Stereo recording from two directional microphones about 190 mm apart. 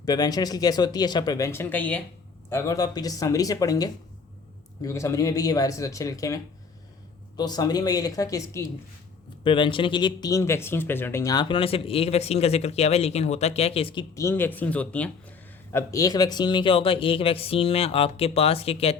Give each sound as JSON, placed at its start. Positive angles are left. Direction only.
{"t": 0.0, "sound": "speech", "side_deg": 20}
{"t": 14.2, "sound": "speech", "side_deg": 15}